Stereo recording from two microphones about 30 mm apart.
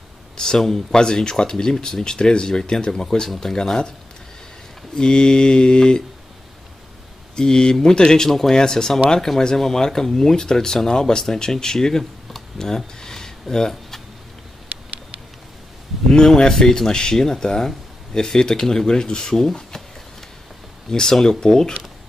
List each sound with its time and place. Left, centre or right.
0.4 s speech: left
4.9 s speech: left
7.3 s speech: left
8.5 s speech: left
9.3 s speech: centre
9.8 s speech: centre
12.0 s a sound: centre
12.5 s a sound: centre
16.1 s speech: left
20.9 s speech: centre